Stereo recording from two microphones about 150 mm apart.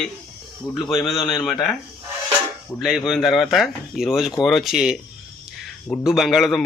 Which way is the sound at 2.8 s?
Centre (ahead or behind).